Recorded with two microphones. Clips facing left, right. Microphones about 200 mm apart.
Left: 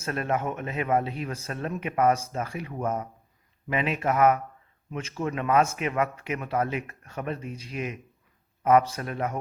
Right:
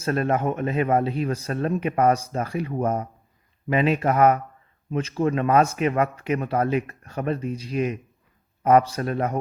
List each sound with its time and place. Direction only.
0.0 s speech: 35° right (ahead or behind)